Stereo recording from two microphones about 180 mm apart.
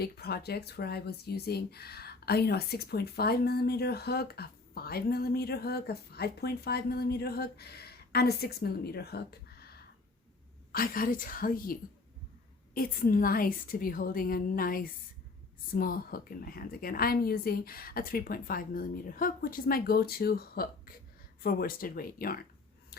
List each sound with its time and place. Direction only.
0.0 s a woman's voice: 60° left (ahead or behind)